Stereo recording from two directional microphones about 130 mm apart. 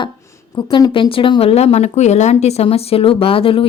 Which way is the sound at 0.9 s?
40° left (ahead or behind).